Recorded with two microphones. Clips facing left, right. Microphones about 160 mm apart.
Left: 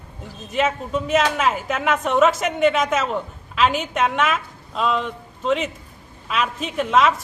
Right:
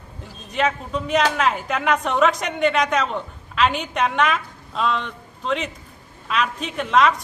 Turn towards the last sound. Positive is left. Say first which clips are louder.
# even
turn(degrees=0)  # may be behind; listen again after turning